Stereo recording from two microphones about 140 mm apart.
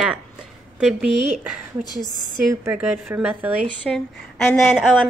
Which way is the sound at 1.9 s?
30° left (ahead or behind).